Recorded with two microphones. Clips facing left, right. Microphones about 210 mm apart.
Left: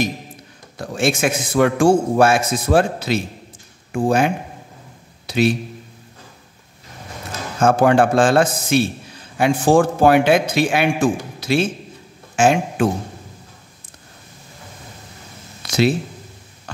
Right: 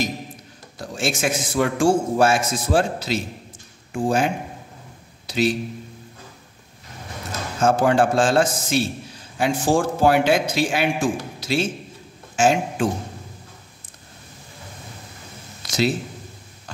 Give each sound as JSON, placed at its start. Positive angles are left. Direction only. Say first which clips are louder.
{"t": 0.7, "sound": "a man's voice", "louder": "left 5 dB", "side_deg": 60}
{"t": 7.6, "sound": "a man's voice", "louder": "left 3 dB", "side_deg": 60}
{"t": 15.6, "sound": "a sound", "louder": "left 4 dB", "side_deg": 60}